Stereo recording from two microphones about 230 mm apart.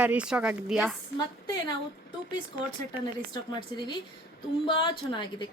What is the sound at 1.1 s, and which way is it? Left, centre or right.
Speech, centre.